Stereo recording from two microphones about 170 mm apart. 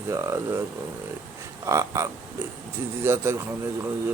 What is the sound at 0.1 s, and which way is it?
Speech, 15° right (ahead or behind).